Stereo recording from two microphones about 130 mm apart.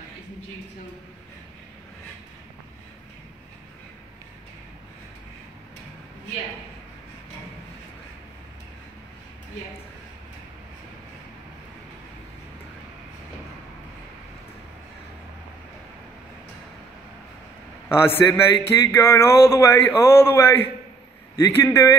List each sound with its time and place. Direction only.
17.8 s a man's voice: 15° left (ahead or behind)